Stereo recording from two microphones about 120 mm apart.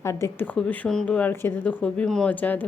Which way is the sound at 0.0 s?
20° left (ahead or behind).